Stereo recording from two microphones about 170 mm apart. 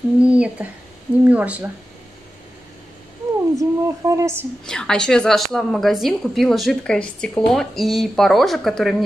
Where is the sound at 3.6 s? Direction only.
20° right (ahead or behind).